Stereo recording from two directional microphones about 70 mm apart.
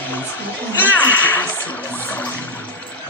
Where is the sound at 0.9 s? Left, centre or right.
Left.